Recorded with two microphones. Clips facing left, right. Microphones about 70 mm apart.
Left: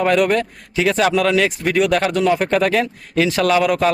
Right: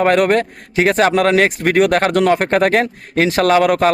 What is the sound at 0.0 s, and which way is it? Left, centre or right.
Speech, right.